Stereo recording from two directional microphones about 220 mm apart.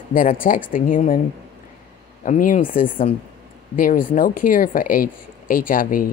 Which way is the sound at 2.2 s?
35° left (ahead or behind).